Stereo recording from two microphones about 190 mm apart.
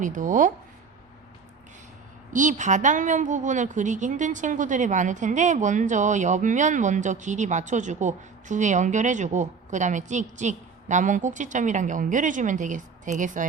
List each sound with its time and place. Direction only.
0.0 s speech: 40° right (ahead or behind)
2.3 s a woman's voice: 40° right (ahead or behind)